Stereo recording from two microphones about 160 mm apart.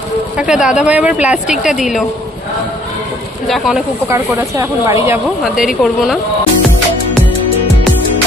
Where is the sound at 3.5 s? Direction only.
Centre (ahead or behind).